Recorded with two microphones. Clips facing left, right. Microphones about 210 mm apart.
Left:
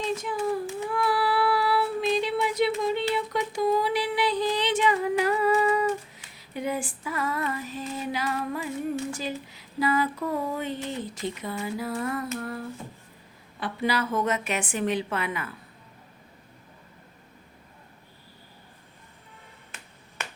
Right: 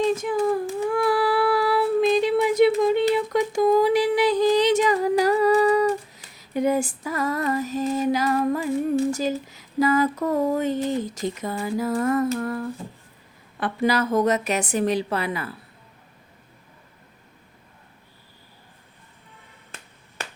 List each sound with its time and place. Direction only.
0.2 s child singing: 40° right (ahead or behind)
13.6 s a woman's voice: 45° right (ahead or behind)